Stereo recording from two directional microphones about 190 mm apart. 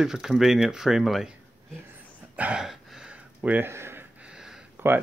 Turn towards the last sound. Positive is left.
turn(degrees=-5)  # may be behind; listen again after turning